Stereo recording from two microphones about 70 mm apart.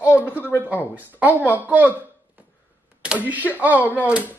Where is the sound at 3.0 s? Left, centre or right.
Centre.